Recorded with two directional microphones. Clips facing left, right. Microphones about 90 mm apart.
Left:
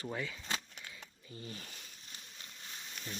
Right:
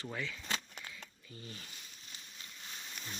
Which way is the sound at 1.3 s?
30° left (ahead or behind).